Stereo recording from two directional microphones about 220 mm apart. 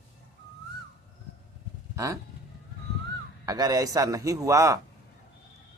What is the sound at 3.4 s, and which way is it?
Speech, 15° right (ahead or behind).